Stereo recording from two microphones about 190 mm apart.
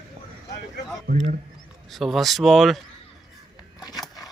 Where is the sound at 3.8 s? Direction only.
20° left (ahead or behind).